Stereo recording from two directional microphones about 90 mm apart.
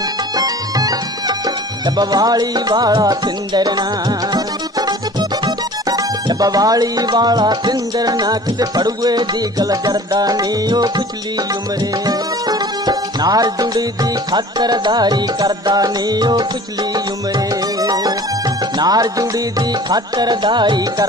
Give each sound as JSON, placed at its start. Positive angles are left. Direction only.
{"t": 0.4, "sound": "music", "side_deg": -45}
{"t": 2.0, "sound": "music", "side_deg": -50}
{"t": 12.1, "sound": "music", "side_deg": -50}
{"t": 17.7, "sound": "music", "side_deg": -45}